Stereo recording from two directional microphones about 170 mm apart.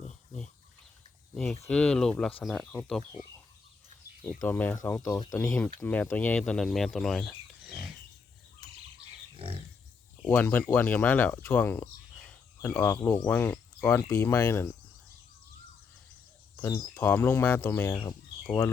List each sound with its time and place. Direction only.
0.1 s a sound: 5° left (ahead or behind)
1.3 s speech: 5° left (ahead or behind)
4.4 s speech: 10° left (ahead or behind)
9.3 s pig: 35° right (ahead or behind)
10.2 s speech: 10° left (ahead or behind)
16.6 s speech: 15° left (ahead or behind)